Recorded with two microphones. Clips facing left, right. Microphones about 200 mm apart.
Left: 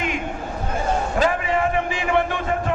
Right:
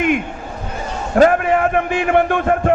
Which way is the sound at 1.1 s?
55° right (ahead or behind).